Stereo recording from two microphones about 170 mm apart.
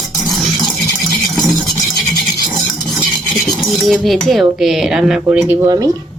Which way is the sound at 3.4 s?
Centre (ahead or behind).